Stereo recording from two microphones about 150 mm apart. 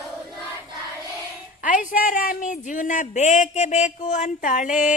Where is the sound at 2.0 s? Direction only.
65° left (ahead or behind).